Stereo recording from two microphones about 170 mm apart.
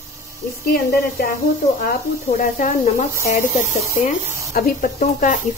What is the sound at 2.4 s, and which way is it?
Speech, 50° left (ahead or behind).